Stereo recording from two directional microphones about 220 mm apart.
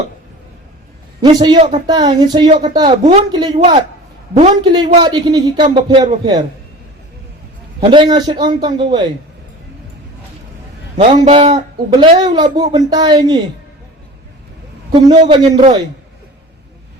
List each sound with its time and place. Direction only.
1.2 s speech: 20° right (ahead or behind)
2.5 s speech: 30° right (ahead or behind)
7.9 s speech: 20° right (ahead or behind)
11.0 s speech: 25° right (ahead or behind)
15.0 s speech: 20° right (ahead or behind)